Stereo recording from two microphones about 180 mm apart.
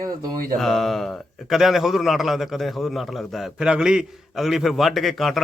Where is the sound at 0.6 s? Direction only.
Centre (ahead or behind).